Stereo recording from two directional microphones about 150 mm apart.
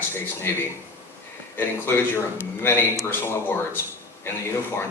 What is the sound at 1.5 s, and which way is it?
Speech, 15° left (ahead or behind).